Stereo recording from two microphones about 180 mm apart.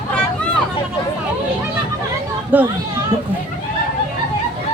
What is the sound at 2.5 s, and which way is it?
Speech, 10° right (ahead or behind).